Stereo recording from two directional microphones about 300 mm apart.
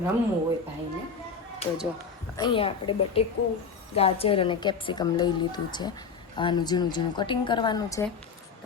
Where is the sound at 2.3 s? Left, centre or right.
Centre.